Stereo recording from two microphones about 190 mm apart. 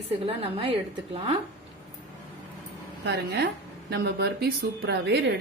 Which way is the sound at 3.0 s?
60° right (ahead or behind).